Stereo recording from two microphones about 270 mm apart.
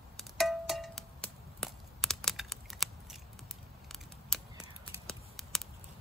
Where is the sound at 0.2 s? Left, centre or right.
Centre.